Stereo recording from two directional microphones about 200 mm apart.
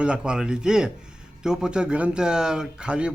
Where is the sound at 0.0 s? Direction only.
5° right (ahead or behind).